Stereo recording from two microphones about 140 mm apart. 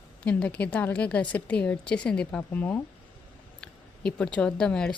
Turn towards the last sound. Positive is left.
turn(degrees=5)  # may be behind; listen again after turning